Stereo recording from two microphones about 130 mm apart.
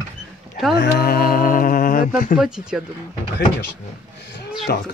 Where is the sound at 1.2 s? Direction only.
90° left.